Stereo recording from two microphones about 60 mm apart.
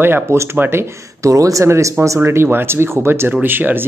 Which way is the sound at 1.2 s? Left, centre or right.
Right.